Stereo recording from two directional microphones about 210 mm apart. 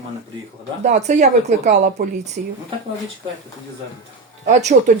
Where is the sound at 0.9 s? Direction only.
35° right (ahead or behind).